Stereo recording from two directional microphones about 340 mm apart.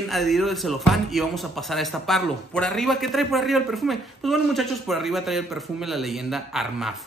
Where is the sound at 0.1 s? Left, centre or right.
Centre.